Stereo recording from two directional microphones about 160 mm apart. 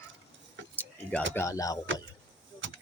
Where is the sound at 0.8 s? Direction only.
10° left (ahead or behind).